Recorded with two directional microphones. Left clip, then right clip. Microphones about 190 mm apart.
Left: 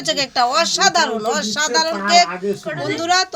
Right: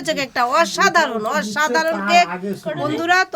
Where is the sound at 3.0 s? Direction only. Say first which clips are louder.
Right 1 dB; 10° right (ahead or behind).